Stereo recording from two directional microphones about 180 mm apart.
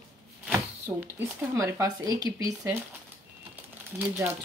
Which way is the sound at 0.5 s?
10° right (ahead or behind).